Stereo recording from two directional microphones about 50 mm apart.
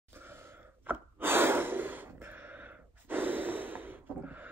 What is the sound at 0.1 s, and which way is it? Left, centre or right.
Sneeze, right.